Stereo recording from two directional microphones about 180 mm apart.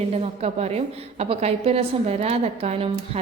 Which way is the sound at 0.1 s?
35° right (ahead or behind).